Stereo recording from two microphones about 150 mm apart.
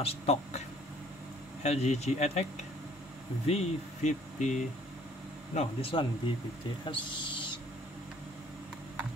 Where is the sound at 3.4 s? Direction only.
50° left (ahead or behind).